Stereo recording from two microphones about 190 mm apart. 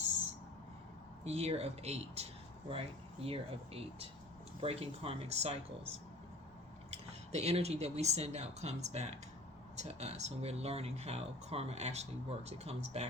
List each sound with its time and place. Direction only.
1.2 s speech: 35° right (ahead or behind)